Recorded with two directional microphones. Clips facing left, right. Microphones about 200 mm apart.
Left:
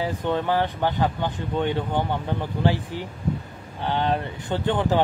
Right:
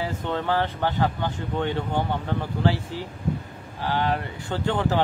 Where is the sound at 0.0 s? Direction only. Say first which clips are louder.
Left 3 dB; 15° left (ahead or behind).